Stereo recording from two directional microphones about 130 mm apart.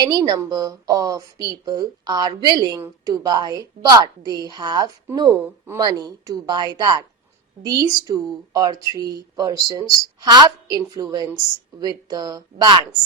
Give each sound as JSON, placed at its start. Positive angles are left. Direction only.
{"t": 0.0, "sound": "a woman's voice", "side_deg": -30}
{"t": 5.3, "sound": "a woman's voice", "side_deg": -20}